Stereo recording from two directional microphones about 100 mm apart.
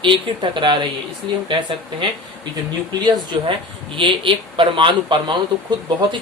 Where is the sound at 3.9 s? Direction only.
60° right (ahead or behind).